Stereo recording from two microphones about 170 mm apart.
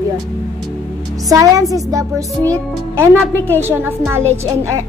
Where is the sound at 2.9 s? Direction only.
15° right (ahead or behind).